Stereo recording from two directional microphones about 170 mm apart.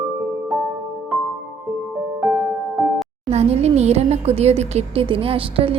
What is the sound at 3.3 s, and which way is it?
Speech, 40° right (ahead or behind).